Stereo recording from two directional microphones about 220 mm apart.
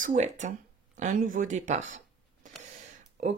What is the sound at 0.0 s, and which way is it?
Speech, 35° right (ahead or behind).